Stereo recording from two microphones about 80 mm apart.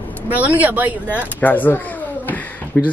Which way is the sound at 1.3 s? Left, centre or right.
Left.